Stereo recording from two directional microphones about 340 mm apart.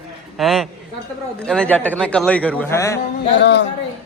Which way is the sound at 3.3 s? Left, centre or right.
Left.